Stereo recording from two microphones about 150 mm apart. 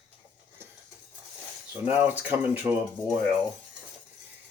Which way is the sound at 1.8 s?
10° right (ahead or behind).